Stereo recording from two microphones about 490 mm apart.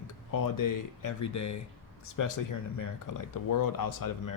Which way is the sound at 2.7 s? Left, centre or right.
Left.